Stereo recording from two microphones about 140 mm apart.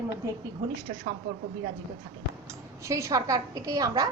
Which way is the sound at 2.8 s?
20° right (ahead or behind).